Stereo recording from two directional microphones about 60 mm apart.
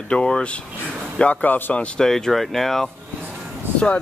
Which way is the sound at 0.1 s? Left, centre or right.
Centre.